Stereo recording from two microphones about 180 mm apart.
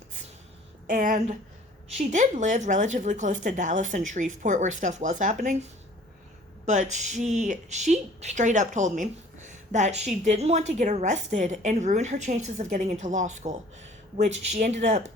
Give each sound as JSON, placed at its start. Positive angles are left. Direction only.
{"t": 0.9, "sound": "speech", "side_deg": -45}
{"t": 6.7, "sound": "a woman's voice", "side_deg": -40}